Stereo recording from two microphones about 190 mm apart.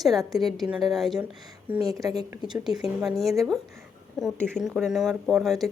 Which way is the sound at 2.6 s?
Centre (ahead or behind).